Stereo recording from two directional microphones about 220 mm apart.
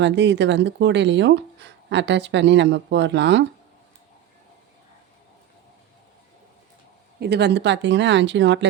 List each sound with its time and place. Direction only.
0.0 s speech: 50° right (ahead or behind)
7.2 s speech: 50° right (ahead or behind)